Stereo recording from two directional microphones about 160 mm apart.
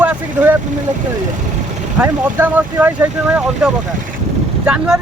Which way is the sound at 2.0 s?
10° right (ahead or behind).